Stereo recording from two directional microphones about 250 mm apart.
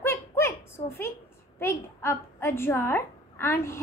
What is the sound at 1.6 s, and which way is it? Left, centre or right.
A woman's voice, centre.